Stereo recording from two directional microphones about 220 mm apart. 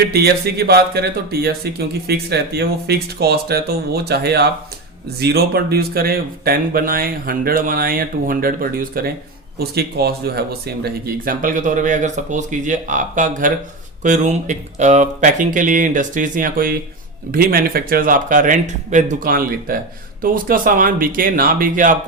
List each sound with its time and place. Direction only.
0.1 s speech: 45° right (ahead or behind)